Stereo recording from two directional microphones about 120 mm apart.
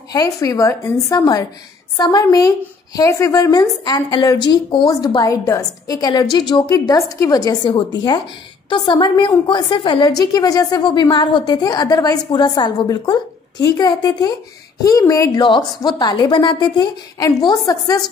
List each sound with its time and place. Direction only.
0.1 s a woman's voice: 30° left (ahead or behind)
15.3 s a woman's voice: 40° left (ahead or behind)